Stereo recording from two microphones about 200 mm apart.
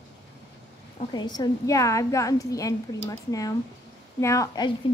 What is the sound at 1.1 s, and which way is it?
A woman's voice, 20° left (ahead or behind).